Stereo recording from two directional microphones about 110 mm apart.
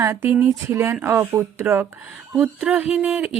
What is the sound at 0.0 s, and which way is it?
Speech, 20° right (ahead or behind).